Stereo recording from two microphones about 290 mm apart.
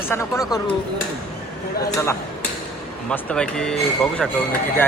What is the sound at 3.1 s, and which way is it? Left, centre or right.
Speech, centre.